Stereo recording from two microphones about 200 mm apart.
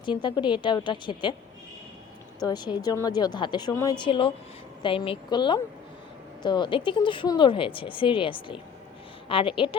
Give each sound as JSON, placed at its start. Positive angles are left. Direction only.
{"t": 0.0, "sound": "speech", "side_deg": 25}
{"t": 2.4, "sound": "speech", "side_deg": 20}